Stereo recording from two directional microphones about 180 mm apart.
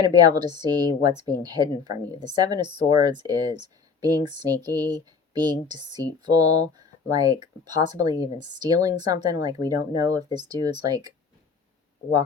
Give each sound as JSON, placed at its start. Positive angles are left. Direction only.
{"t": 0.0, "sound": "speech", "side_deg": -20}